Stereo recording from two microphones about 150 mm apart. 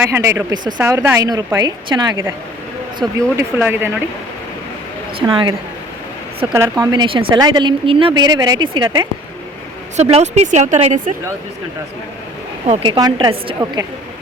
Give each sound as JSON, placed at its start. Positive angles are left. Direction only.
{"t": 0.0, "sound": "speech", "side_deg": -20}
{"t": 3.2, "sound": "speech", "side_deg": -15}
{"t": 5.3, "sound": "a woman's voice", "side_deg": -35}
{"t": 6.5, "sound": "speech", "side_deg": -15}
{"t": 6.9, "sound": "speech", "side_deg": -35}
{"t": 10.0, "sound": "speech", "side_deg": -45}
{"t": 12.8, "sound": "a woman's voice", "side_deg": -30}